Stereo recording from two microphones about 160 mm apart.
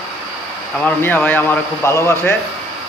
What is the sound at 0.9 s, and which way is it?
A man's voice, 10° left (ahead or behind).